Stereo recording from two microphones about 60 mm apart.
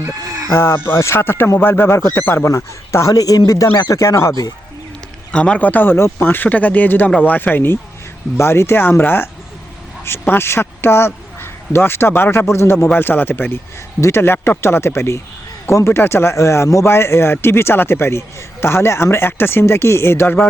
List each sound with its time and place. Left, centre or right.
0.5 s a man's voice: left
3.1 s a man's voice: left
3.8 s speech: left
5.3 s a man's voice: centre; by 7.8 s left
8.4 s a man's voice: left